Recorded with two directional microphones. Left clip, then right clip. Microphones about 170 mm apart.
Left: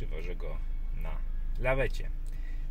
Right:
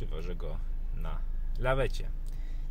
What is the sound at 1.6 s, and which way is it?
Speech, 15° right (ahead or behind).